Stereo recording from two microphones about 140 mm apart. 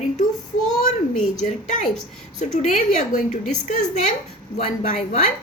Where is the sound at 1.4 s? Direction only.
60° left (ahead or behind).